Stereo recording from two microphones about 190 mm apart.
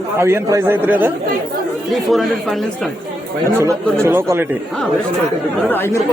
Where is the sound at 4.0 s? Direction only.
15° right (ahead or behind).